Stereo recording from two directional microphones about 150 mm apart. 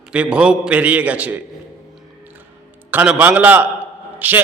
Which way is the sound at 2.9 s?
10° right (ahead or behind).